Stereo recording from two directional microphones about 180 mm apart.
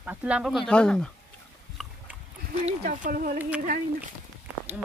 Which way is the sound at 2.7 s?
45° right (ahead or behind).